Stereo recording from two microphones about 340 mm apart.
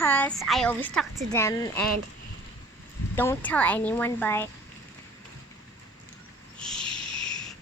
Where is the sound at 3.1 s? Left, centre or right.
Centre.